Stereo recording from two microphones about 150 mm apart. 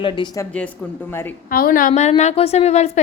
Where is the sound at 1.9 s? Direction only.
50° left (ahead or behind).